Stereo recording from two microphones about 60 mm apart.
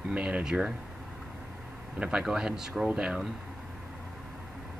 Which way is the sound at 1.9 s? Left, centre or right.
Centre.